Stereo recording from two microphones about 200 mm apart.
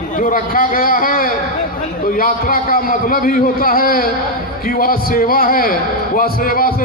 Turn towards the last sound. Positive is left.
turn(degrees=45)  # may be behind; listen again after turning